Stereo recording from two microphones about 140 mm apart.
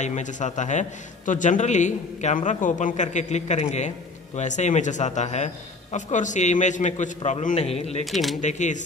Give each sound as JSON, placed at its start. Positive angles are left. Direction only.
{"t": 0.0, "sound": "a man's voice", "side_deg": 60}
{"t": 8.0, "sound": "speech", "side_deg": 0}
{"t": 8.4, "sound": "a man's voice", "side_deg": 60}